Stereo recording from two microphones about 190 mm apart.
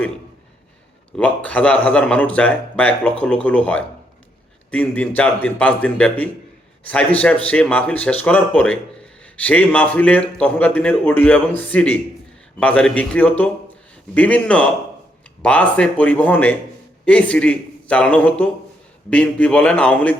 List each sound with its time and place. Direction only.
1.1 s speech: 5° left (ahead or behind)